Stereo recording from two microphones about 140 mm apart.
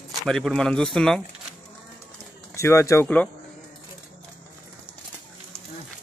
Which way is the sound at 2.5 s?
20° left (ahead or behind).